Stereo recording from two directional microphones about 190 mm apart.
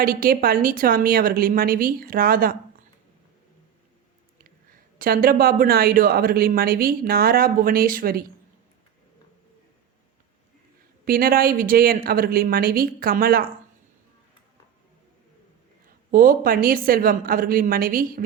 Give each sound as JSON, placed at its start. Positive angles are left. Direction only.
{"t": 0.0, "sound": "speech", "side_deg": -50}
{"t": 4.9, "sound": "speech", "side_deg": -50}
{"t": 11.0, "sound": "speech", "side_deg": -50}
{"t": 16.1, "sound": "speech", "side_deg": -45}